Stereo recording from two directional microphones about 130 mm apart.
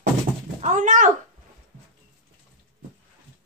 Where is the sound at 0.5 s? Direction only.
70° right (ahead or behind).